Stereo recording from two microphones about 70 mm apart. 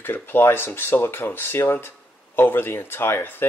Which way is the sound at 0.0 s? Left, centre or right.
Left.